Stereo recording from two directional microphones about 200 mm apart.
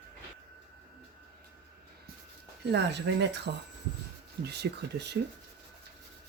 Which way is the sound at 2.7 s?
60° right (ahead or behind).